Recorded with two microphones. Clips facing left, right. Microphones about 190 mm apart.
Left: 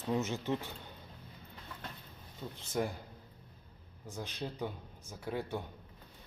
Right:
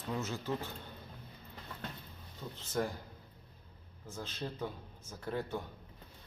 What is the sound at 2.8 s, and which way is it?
Speech, 15° left (ahead or behind).